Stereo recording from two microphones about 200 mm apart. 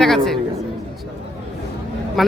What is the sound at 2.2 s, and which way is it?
Speech, centre (ahead or behind).